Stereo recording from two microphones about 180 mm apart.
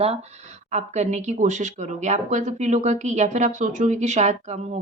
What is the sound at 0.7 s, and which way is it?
Speech, 40° right (ahead or behind).